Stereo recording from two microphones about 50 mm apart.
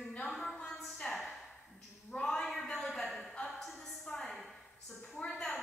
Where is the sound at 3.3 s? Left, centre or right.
Centre.